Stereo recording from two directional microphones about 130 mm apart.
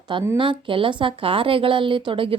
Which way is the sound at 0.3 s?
40° right (ahead or behind).